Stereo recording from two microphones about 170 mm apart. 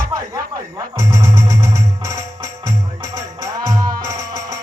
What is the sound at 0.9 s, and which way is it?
Music, 20° right (ahead or behind).